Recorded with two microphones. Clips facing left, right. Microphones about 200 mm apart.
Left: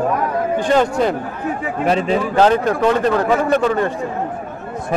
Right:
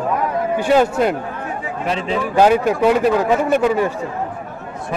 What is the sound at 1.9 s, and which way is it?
Speech, 45° left (ahead or behind).